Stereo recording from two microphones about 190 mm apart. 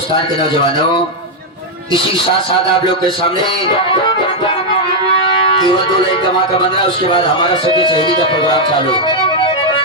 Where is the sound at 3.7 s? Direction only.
25° left (ahead or behind).